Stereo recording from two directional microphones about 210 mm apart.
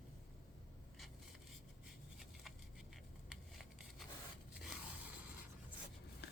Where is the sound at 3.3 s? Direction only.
Centre (ahead or behind).